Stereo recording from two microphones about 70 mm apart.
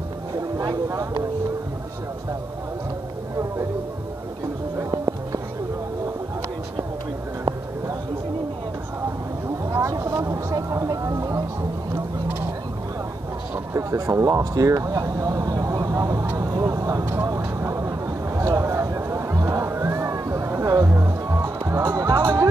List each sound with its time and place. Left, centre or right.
9.7 s a sound: right
10.5 s speech: right
13.7 s speech: right
16.3 s vehicle: right
17.0 s vehicle: right
17.4 s a sound: right
20.8 s music: right
21.8 s music: right
22.2 s speech: right